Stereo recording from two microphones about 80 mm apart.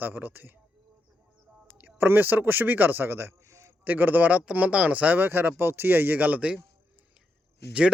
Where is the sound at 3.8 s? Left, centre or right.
Right.